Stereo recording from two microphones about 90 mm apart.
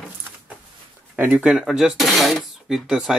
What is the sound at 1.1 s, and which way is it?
Speech, 15° right (ahead or behind).